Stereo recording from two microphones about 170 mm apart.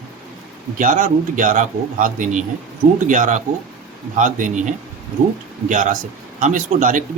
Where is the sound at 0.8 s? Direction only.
50° right (ahead or behind).